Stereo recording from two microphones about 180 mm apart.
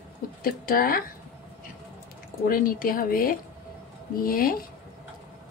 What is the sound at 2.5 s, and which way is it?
Speech, 50° left (ahead or behind).